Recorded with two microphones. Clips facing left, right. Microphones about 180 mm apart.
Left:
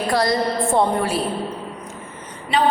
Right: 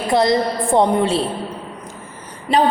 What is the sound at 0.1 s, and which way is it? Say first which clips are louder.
A woman's voice: right 4 dB; 20° right (ahead or behind).